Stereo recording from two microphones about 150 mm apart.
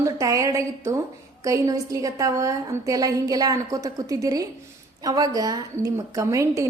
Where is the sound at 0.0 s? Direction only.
20° right (ahead or behind).